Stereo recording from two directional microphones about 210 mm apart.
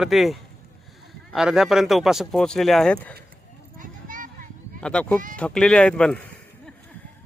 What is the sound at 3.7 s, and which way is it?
Clip-clop, 40° right (ahead or behind).